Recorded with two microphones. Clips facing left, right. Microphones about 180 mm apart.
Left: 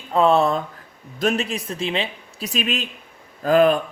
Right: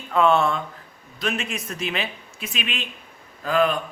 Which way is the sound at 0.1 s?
35° left (ahead or behind).